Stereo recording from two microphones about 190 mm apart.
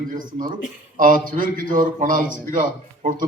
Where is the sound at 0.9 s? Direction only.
45° right (ahead or behind).